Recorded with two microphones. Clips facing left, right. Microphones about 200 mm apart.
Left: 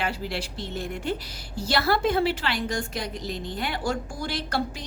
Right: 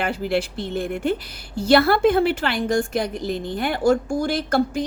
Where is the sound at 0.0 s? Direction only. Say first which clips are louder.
Right 7 dB; 55° right (ahead or behind).